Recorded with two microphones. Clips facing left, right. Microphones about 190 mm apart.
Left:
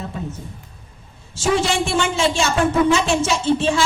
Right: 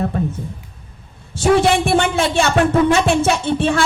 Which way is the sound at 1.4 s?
60° right (ahead or behind).